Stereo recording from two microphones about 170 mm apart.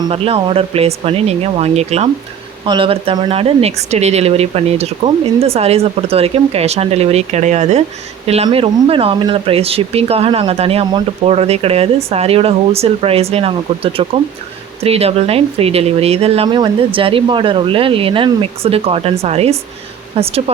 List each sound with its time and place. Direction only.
0.1 s speech: 35° right (ahead or behind)